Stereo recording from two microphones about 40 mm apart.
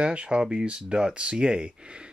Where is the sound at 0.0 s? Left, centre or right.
Right.